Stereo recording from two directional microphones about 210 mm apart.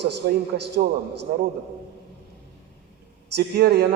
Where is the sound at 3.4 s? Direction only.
50° right (ahead or behind).